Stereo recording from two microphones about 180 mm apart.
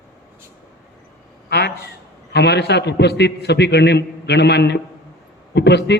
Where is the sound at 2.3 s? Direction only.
70° left (ahead or behind).